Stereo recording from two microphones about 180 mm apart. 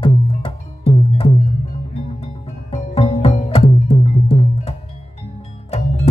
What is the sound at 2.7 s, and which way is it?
Music, 35° left (ahead or behind).